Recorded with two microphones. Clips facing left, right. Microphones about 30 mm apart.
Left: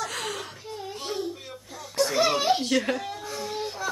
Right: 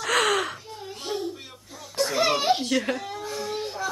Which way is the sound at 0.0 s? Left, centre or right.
Right.